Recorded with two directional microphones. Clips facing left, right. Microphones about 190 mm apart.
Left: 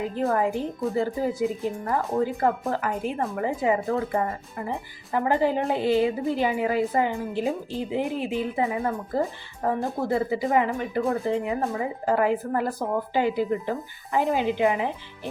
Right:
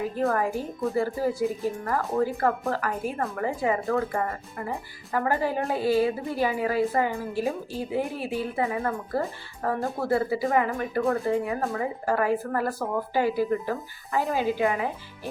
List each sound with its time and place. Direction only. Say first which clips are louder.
0.2 s speech: left 2 dB; 20° left (ahead or behind)